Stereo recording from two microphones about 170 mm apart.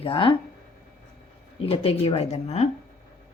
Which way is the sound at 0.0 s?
30° left (ahead or behind).